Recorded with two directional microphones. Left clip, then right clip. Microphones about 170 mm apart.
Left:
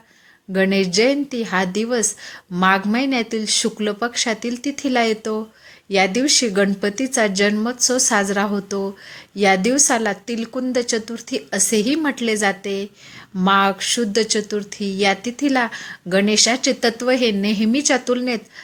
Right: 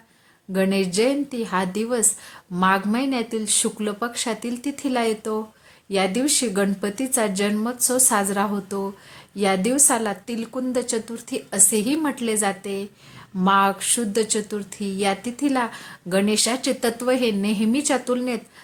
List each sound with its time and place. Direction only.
0.5 s speech: 15° left (ahead or behind)